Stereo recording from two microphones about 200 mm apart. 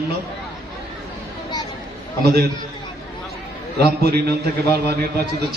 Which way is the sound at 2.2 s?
50° right (ahead or behind).